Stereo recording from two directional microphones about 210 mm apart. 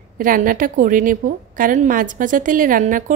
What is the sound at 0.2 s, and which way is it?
A woman's voice, 40° right (ahead or behind).